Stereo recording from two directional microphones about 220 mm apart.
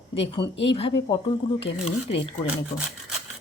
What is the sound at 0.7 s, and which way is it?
Speech, 25° left (ahead or behind).